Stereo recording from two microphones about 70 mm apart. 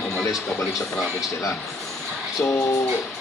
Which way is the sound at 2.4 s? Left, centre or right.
Left.